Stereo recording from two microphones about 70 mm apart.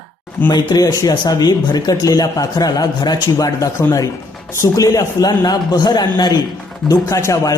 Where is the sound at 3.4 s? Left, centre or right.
Left.